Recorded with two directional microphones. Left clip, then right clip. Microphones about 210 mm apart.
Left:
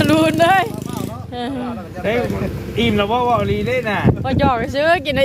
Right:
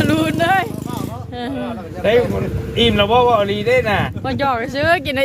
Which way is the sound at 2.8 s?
50° right (ahead or behind).